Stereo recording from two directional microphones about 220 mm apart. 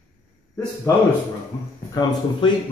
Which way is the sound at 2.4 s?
20° left (ahead or behind).